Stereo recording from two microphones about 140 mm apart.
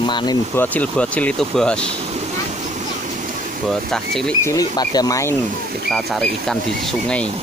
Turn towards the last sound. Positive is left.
turn(degrees=5)  # may be behind; listen again after turning